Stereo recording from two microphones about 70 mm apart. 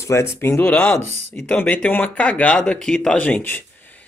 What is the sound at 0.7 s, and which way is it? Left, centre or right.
Speech, centre.